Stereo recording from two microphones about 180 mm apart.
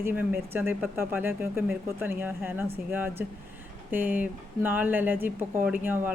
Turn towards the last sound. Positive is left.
turn(degrees=-10)  # may be behind; listen again after turning